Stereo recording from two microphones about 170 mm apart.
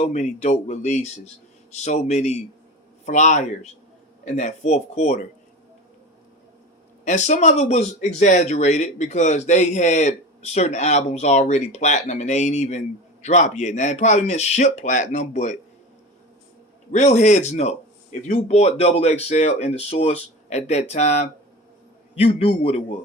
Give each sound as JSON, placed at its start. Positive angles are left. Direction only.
{"t": 0.0, "sound": "speech", "side_deg": 40}
{"t": 7.0, "sound": "speech", "side_deg": 45}
{"t": 16.9, "sound": "speech", "side_deg": 45}